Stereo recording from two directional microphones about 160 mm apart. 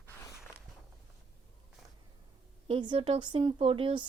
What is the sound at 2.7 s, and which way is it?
A woman's voice, 30° right (ahead or behind).